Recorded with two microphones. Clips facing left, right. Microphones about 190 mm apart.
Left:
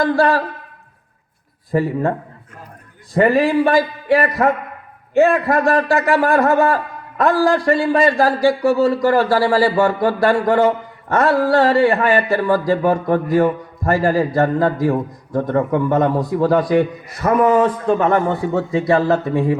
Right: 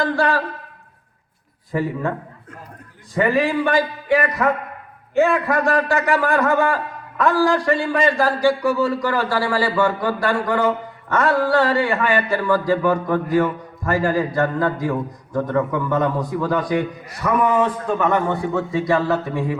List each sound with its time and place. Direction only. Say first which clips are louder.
0.0 s a man's voice: left 4 dB; 40° left (ahead or behind)
1.7 s a man's voice: left 5 dB; 40° left (ahead or behind)
3.2 s a man's voice: left 4 dB; 40° left (ahead or behind)